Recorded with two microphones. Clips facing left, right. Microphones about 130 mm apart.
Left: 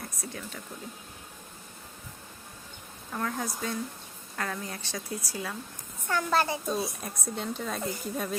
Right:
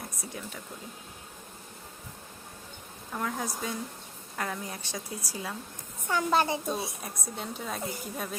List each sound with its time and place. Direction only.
3.1 s a woman's voice: 5° right (ahead or behind); by 6.9 s 25° right (ahead or behind)
7.0 s speech: 5° right (ahead or behind)